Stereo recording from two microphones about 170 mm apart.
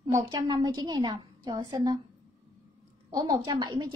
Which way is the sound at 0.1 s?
20° right (ahead or behind).